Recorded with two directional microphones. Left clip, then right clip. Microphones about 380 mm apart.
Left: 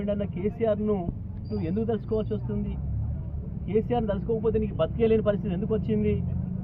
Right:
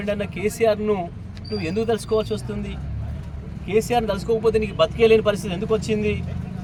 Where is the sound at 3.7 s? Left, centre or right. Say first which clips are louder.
Right 6 dB; centre.